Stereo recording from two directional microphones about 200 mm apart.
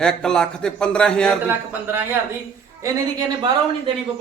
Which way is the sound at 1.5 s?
10° right (ahead or behind).